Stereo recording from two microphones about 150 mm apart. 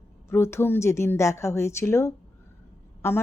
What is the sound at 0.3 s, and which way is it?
A woman's voice, 15° left (ahead or behind).